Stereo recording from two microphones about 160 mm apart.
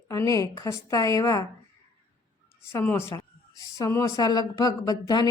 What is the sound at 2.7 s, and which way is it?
Speech, 15° left (ahead or behind).